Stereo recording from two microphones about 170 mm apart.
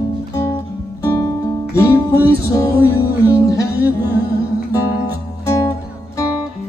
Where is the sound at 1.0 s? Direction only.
20° left (ahead or behind).